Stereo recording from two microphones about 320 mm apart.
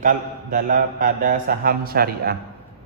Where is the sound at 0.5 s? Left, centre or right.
Right.